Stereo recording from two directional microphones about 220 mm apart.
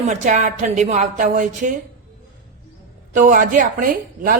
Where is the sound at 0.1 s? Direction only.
35° right (ahead or behind).